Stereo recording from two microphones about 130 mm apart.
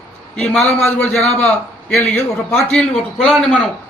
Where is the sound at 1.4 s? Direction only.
10° left (ahead or behind).